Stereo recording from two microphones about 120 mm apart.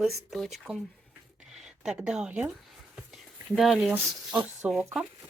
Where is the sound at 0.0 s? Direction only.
Centre (ahead or behind).